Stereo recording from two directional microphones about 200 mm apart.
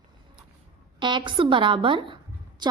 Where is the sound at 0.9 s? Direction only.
25° right (ahead or behind).